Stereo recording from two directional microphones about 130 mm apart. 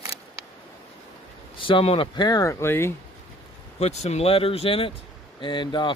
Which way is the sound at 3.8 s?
55° left (ahead or behind).